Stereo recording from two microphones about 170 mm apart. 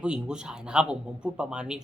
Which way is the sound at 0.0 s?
5° right (ahead or behind).